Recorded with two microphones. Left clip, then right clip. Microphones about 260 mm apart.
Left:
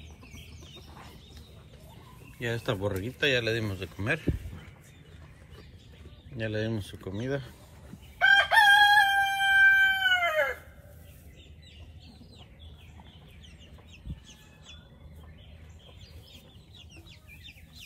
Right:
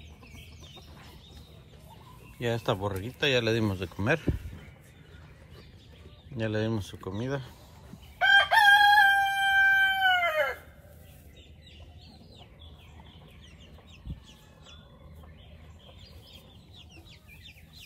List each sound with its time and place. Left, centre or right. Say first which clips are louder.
2.4 s speech: right 2 dB; centre
6.3 s speech: right 2 dB; centre
8.2 s crowing: even; right